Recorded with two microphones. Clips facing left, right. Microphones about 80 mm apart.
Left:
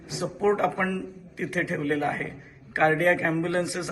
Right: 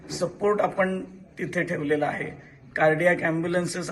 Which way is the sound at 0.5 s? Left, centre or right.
Right.